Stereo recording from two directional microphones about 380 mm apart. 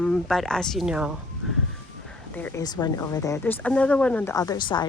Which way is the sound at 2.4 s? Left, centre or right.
Centre.